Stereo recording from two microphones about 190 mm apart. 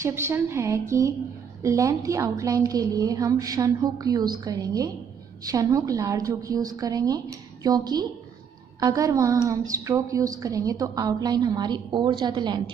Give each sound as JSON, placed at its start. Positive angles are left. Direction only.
{"t": 0.0, "sound": "a woman's voice", "side_deg": -15}